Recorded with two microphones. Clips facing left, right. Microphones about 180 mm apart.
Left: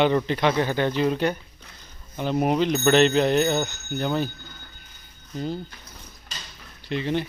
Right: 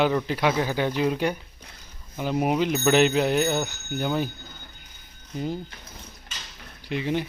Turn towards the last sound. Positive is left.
turn(degrees=-10)  # may be behind; listen again after turning